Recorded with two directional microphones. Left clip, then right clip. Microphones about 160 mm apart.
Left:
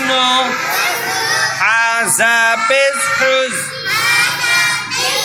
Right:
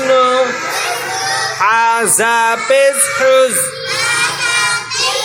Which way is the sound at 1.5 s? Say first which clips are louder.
Right 4 dB; 30° right (ahead or behind).